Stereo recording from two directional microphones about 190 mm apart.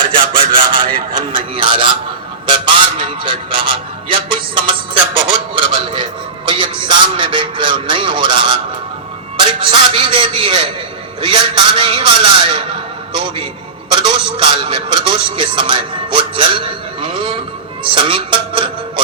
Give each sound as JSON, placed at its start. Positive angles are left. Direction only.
{"t": 0.9, "sound": "a sound", "side_deg": -25}
{"t": 2.5, "sound": "music", "side_deg": -25}
{"t": 6.5, "sound": "a sound", "side_deg": -25}
{"t": 9.4, "sound": "music", "side_deg": -25}
{"t": 11.2, "sound": "speech", "side_deg": -25}
{"t": 17.8, "sound": "music", "side_deg": -25}